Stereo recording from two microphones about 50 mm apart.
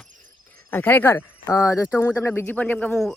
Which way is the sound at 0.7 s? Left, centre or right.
Left.